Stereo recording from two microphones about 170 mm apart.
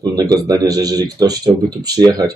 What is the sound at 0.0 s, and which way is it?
Speech, 20° right (ahead or behind).